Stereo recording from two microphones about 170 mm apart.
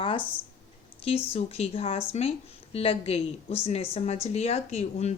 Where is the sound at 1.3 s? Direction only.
35° left (ahead or behind).